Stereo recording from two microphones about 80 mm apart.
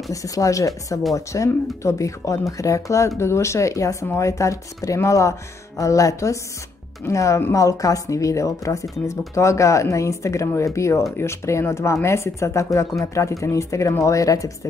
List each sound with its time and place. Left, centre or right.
0.1 s speech: left